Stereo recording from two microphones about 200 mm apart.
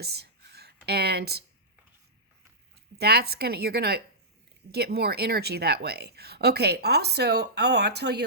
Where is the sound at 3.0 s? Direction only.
55° right (ahead or behind).